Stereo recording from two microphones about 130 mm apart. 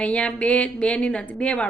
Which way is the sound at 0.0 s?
10° left (ahead or behind).